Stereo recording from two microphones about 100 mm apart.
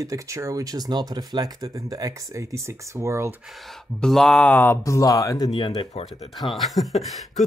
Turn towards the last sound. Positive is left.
turn(degrees=0)  # may be behind; listen again after turning